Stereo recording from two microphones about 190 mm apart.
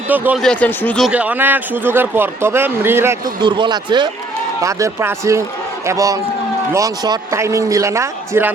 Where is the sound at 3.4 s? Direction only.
25° right (ahead or behind).